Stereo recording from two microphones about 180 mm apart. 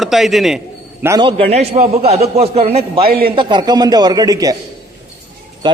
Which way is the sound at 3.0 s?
55° right (ahead or behind).